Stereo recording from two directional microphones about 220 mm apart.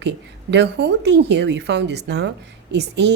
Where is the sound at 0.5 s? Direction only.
50° right (ahead or behind).